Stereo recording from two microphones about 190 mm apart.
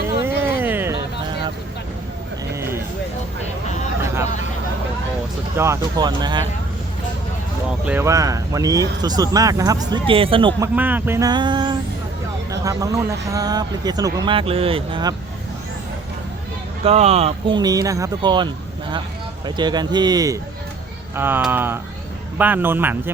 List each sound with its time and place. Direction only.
0.2 s a sound: 10° right (ahead or behind)
4.0 s vehicle: 15° right (ahead or behind)
5.5 s speech: 15° right (ahead or behind)
7.9 s speech: 15° right (ahead or behind)
10.6 s speech: 10° right (ahead or behind); by 15.1 s 25° right (ahead or behind)
16.8 s speech: 35° right (ahead or behind)
17.6 s speech: 20° right (ahead or behind)
19.5 s speech: 25° right (ahead or behind)